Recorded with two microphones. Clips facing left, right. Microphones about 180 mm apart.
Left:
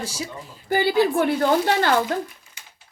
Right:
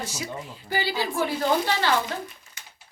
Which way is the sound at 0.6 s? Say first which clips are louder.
Left 9 dB; 50° left (ahead or behind).